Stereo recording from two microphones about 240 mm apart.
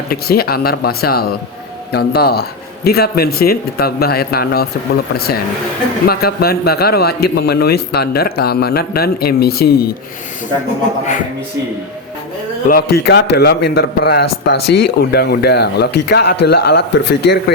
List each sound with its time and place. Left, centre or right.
0.1 s a man's voice: left
6.1 s a man's voice: left
12.6 s a man's voice: left